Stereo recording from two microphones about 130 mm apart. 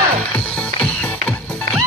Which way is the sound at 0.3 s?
5° left (ahead or behind).